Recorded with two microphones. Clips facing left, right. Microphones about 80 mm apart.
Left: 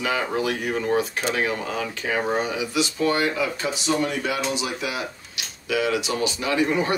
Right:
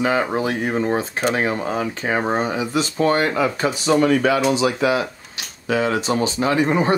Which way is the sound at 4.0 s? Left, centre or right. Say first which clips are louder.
Right 8 dB; right.